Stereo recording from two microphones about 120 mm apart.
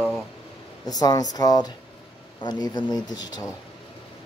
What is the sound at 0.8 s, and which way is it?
Speech, 30° left (ahead or behind).